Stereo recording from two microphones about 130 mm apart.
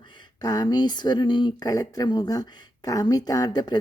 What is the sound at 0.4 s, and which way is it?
Speech, 30° left (ahead or behind).